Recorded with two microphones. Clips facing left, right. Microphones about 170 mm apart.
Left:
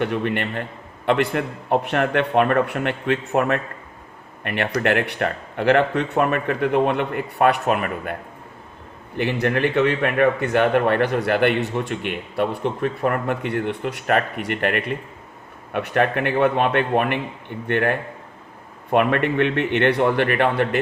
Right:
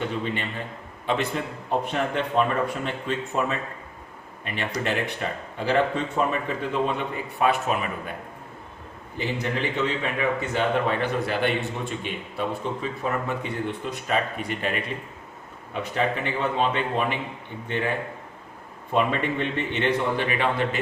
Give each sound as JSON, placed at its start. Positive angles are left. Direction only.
{"t": 0.0, "sound": "a man's voice", "side_deg": 65}
{"t": 9.1, "sound": "a man's voice", "side_deg": 65}